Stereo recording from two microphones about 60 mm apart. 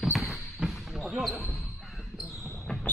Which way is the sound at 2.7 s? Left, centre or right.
Centre.